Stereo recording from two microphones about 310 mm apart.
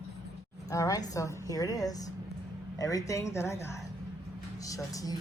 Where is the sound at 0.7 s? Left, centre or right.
Centre.